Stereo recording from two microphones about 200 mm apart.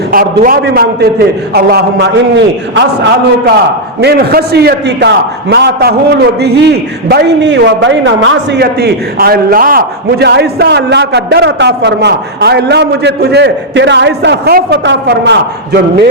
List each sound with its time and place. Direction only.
0.1 s a man's voice: 45° right (ahead or behind); by 3.5 s 60° right (ahead or behind)
4.0 s a man's voice: 50° right (ahead or behind); by 8.6 s 70° right (ahead or behind)
8.6 s a man's voice: 50° right (ahead or behind)